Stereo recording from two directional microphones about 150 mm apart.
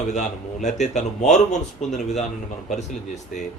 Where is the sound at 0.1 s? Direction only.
50° left (ahead or behind).